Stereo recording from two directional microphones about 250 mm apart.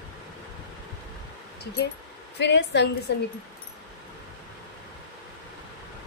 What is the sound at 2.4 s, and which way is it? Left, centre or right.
Speech, left.